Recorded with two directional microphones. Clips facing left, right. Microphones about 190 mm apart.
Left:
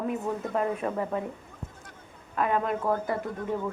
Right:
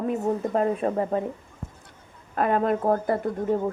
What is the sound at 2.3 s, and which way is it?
Speech, 45° right (ahead or behind).